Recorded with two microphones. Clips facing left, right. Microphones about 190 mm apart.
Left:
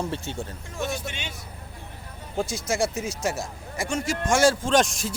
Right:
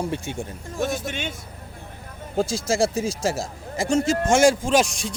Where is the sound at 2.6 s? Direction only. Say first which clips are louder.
Right 3 dB; 30° right (ahead or behind).